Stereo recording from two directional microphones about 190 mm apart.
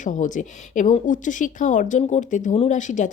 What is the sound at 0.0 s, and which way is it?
Speech, 40° left (ahead or behind).